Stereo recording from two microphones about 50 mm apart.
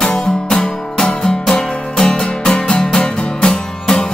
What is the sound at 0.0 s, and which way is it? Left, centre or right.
Music, centre.